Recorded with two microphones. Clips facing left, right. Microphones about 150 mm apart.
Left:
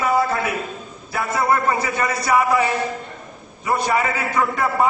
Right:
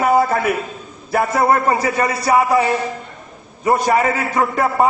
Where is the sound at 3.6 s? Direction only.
45° right (ahead or behind).